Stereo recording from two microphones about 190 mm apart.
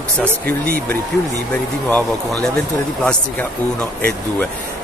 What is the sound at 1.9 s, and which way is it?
Speech, 5° left (ahead or behind).